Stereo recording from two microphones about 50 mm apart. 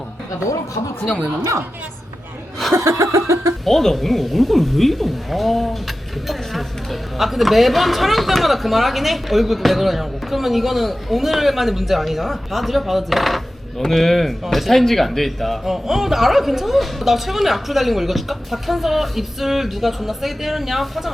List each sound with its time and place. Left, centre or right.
1.0 s speech: centre
2.7 s a sound: right
3.7 s speech: centre